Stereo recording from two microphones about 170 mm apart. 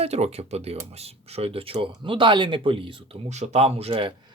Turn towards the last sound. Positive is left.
turn(degrees=-30)  # may be behind; listen again after turning